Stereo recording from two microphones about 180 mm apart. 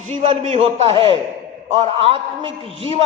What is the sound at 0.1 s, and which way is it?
A man's voice, 40° right (ahead or behind).